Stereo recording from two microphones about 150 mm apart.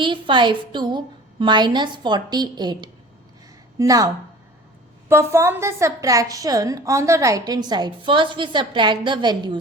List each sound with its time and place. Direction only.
0.0 s a woman's voice: 35° right (ahead or behind)